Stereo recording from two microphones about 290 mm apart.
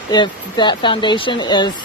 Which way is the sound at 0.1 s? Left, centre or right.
Centre.